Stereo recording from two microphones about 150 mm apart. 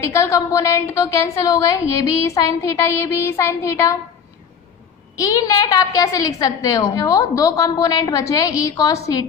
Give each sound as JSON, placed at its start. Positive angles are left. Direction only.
{"t": 0.1, "sound": "a woman's voice", "side_deg": 20}
{"t": 2.2, "sound": "a sound", "side_deg": 20}
{"t": 5.2, "sound": "a woman's voice", "side_deg": 25}